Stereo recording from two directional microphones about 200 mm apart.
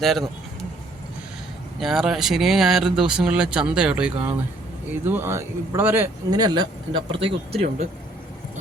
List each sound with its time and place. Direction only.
0.0 s speech: centre (ahead or behind)
1.8 s a man's voice: centre (ahead or behind); by 7.6 s 25° right (ahead or behind)